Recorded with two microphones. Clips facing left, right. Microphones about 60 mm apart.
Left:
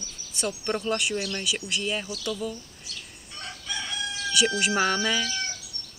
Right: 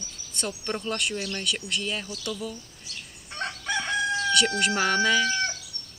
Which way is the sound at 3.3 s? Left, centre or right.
Right.